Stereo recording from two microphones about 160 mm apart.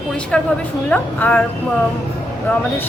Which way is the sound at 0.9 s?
10° left (ahead or behind).